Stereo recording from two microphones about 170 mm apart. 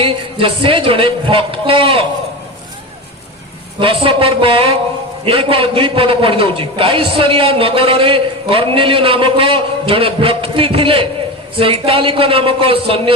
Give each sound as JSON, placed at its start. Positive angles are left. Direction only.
{"t": 0.0, "sound": "a man's voice", "side_deg": -35}
{"t": 3.8, "sound": "a man's voice", "side_deg": -30}